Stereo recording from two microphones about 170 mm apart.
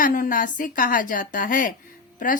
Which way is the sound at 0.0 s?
55° left (ahead or behind).